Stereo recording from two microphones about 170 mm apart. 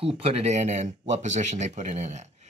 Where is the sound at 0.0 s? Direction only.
35° right (ahead or behind).